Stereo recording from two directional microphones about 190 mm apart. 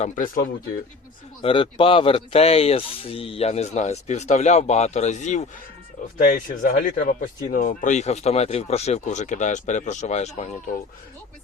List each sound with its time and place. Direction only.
0.0 s speech: 45° left (ahead or behind)
1.4 s speech: 30° left (ahead or behind)